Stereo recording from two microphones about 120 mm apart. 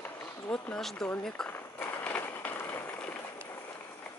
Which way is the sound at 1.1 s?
5° left (ahead or behind).